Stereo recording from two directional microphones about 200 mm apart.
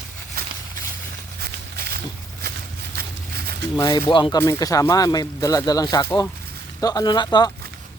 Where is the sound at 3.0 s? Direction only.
50° right (ahead or behind).